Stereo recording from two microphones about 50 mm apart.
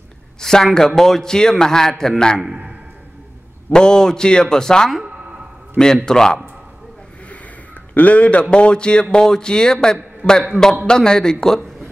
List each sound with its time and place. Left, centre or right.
0.4 s a man's voice: centre
3.7 s a man's voice: centre
6.0 s a man's voice: centre
7.9 s a man's voice: left
10.2 s a man's voice: left
10.9 s a man's voice: centre